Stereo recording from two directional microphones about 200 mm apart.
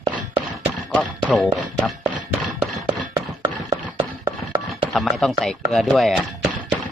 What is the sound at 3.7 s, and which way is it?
Chopping, 25° right (ahead or behind).